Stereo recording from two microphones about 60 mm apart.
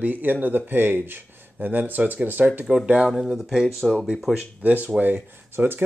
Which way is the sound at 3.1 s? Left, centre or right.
Centre.